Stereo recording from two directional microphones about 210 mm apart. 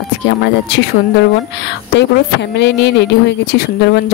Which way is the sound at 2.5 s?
55° left (ahead or behind).